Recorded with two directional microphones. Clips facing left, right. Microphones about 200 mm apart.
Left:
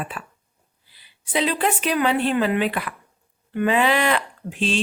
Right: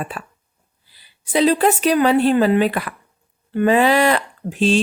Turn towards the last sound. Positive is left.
turn(degrees=-40)  # may be behind; listen again after turning